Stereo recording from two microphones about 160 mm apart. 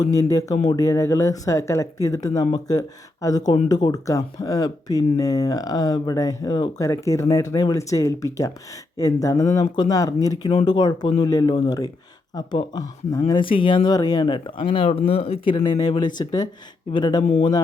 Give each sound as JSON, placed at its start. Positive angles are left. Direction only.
{"t": 0.1, "sound": "speech", "side_deg": 20}